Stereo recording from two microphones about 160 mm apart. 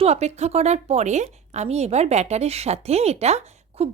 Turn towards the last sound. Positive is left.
turn(degrees=-40)  # may be behind; listen again after turning